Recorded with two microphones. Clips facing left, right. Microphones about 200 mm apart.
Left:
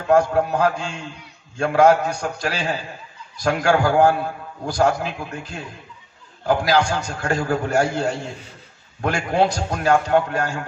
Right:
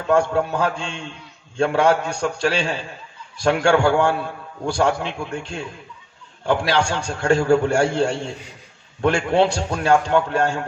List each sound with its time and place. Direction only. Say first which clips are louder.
0.1 s a man's voice: left 2 dB; 30° right (ahead or behind)